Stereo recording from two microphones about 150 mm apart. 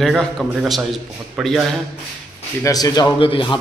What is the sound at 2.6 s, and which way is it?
Speech, 25° left (ahead or behind).